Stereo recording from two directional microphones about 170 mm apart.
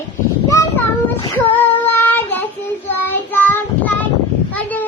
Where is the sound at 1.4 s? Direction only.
10° left (ahead or behind).